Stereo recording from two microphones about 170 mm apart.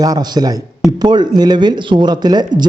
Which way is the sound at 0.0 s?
25° right (ahead or behind).